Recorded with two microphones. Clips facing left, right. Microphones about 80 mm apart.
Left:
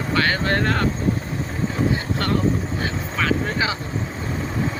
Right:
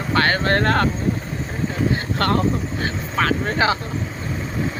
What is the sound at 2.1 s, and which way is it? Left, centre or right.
Speech, right.